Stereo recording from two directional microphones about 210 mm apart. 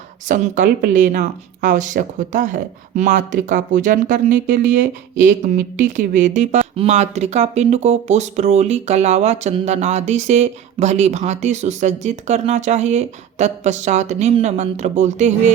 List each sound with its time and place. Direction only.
0.3 s speech: 40° right (ahead or behind)